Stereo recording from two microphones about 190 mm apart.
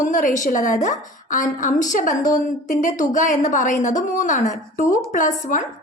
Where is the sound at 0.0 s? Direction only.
45° left (ahead or behind).